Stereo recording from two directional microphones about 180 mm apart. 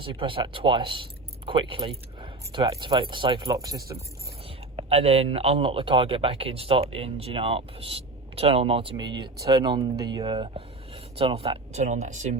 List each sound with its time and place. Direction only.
0.0 s speech: 30° right (ahead or behind)
4.8 s speech: 35° right (ahead or behind)